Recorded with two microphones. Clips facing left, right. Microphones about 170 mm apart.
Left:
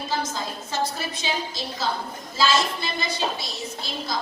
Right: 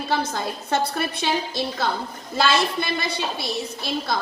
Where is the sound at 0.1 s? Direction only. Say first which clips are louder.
Right 4 dB; 60° right (ahead or behind).